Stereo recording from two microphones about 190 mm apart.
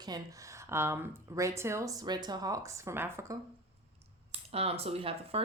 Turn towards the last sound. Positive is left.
turn(degrees=-30)  # may be behind; listen again after turning